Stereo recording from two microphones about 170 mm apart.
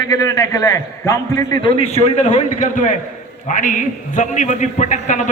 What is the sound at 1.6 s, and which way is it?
A man's voice, 35° left (ahead or behind).